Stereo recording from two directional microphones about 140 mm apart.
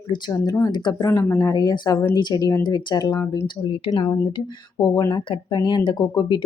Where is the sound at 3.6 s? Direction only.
35° left (ahead or behind).